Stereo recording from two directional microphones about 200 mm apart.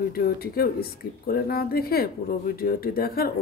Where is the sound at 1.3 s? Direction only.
50° left (ahead or behind).